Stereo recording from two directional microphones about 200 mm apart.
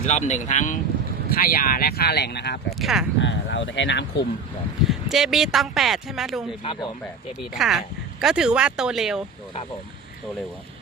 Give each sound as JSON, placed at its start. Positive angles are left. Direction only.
{"t": 0.0, "sound": "speech", "side_deg": 35}
{"t": 2.6, "sound": "speech", "side_deg": 0}
{"t": 3.2, "sound": "speech", "side_deg": 65}
{"t": 4.9, "sound": "speech", "side_deg": 0}